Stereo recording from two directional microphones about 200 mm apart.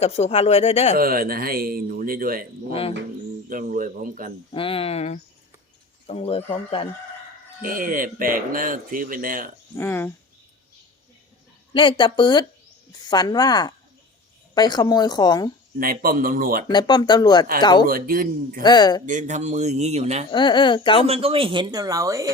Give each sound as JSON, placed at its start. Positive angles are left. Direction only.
{"t": 0.0, "sound": "speech", "side_deg": 30}
{"t": 0.9, "sound": "speech", "side_deg": -45}
{"t": 3.5, "sound": "speech", "side_deg": -45}
{"t": 4.5, "sound": "speech", "side_deg": 25}
{"t": 7.6, "sound": "speech", "side_deg": -45}
{"t": 9.7, "sound": "speech", "side_deg": 10}
{"t": 11.7, "sound": "speech", "side_deg": 25}
{"t": 15.8, "sound": "speech", "side_deg": -45}
{"t": 16.6, "sound": "speech", "side_deg": 20}
{"t": 17.8, "sound": "speech", "side_deg": -45}
{"t": 18.6, "sound": "speech", "side_deg": 20}
{"t": 19.0, "sound": "a man's voice", "side_deg": -40}
{"t": 20.3, "sound": "speech", "side_deg": 25}
{"t": 21.1, "sound": "speech", "side_deg": -30}